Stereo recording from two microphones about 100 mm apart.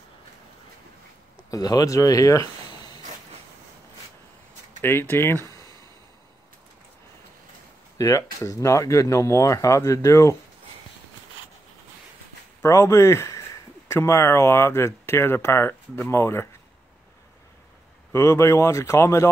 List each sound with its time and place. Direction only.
1.5 s speech: 40° left (ahead or behind)
2.7 s a sound: 45° left (ahead or behind)
4.8 s speech: 25° left (ahead or behind)
8.0 s speech: 35° left (ahead or behind)
12.6 s speech: 35° left (ahead or behind)
18.1 s speech: 30° left (ahead or behind)